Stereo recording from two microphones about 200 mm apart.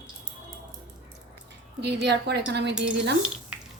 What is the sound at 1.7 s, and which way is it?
A woman's voice, 55° right (ahead or behind).